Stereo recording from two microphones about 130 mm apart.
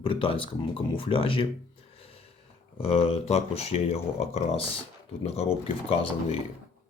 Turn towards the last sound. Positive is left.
turn(degrees=50)  # may be behind; listen again after turning